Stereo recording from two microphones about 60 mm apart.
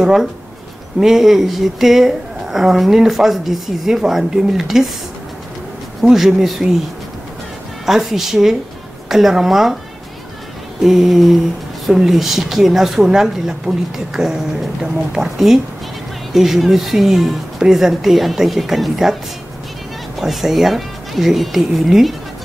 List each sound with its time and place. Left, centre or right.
0.0 s a woman's voice: centre
6.0 s a woman's voice: centre
7.8 s speech: centre
10.8 s a woman's voice: centre
20.2 s speech: centre